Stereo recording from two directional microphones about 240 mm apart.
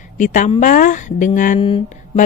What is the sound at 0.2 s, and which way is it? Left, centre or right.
Speech, left.